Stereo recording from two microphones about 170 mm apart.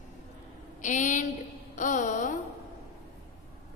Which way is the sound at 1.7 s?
50° left (ahead or behind).